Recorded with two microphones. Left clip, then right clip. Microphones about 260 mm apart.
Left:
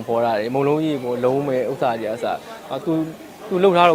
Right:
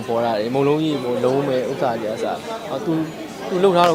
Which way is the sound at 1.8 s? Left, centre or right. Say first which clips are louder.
Even; left.